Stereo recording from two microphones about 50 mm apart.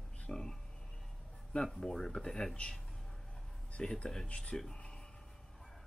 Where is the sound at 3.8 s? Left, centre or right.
Centre.